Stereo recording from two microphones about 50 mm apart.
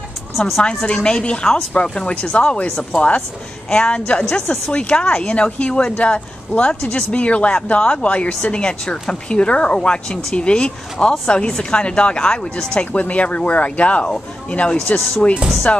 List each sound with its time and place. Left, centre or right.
0.6 s speech: centre